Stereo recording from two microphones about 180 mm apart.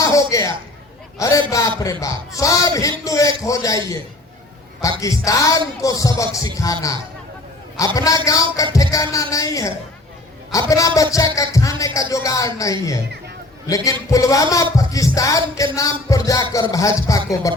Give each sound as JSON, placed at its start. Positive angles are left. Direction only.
{"t": 0.0, "sound": "a sound", "side_deg": 20}
{"t": 1.2, "sound": "speech", "side_deg": 20}
{"t": 4.8, "sound": "speech", "side_deg": 20}
{"t": 7.9, "sound": "music", "side_deg": 20}
{"t": 8.7, "sound": "speech", "side_deg": 20}
{"t": 13.7, "sound": "music", "side_deg": 20}
{"t": 14.1, "sound": "speech", "side_deg": 20}
{"t": 15.5, "sound": "music", "side_deg": 20}